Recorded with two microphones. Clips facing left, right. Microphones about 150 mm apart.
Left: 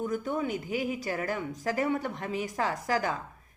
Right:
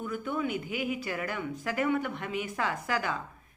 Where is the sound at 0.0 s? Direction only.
40° left (ahead or behind).